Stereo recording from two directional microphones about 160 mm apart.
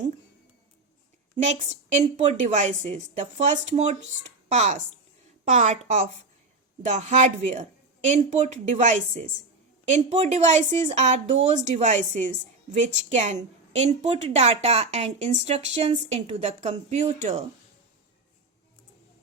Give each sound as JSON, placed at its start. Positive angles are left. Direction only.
{"t": 1.4, "sound": "a woman's voice", "side_deg": -45}